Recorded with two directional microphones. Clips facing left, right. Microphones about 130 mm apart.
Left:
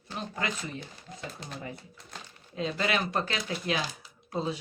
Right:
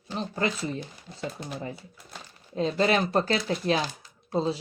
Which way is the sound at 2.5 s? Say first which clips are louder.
Right 6 dB; 35° right (ahead or behind).